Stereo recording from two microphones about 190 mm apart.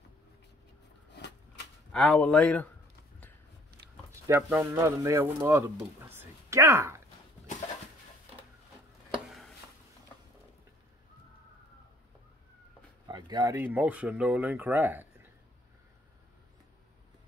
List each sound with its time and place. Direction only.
1.9 s speech: 5° left (ahead or behind)
4.3 s speech: 10° right (ahead or behind)
13.1 s a sound: 20° right (ahead or behind)
13.6 s speech: 10° right (ahead or behind)